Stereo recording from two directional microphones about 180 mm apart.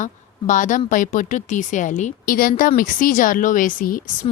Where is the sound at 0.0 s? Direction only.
45° left (ahead or behind).